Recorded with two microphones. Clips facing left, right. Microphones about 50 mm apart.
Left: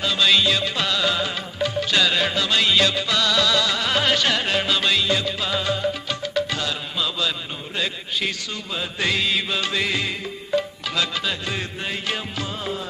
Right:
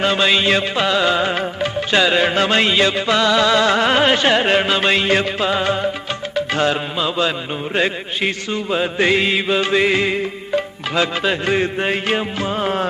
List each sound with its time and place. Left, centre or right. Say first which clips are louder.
0.0 s mantra: right 4 dB; right
0.8 s music: right 6 dB; right
2.3 s mantra: right 5 dB; right
12.6 s music: right 11 dB; right